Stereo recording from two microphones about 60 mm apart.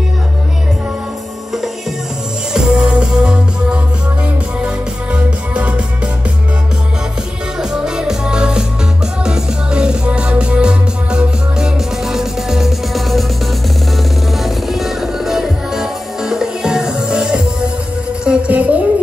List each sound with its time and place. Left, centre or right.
2.5 s music: centre
7.7 s music: centre
14.3 s music: centre; by 18.8 s right